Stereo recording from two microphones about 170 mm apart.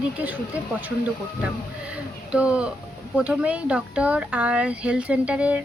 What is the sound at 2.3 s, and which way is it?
A woman's voice, 5° right (ahead or behind).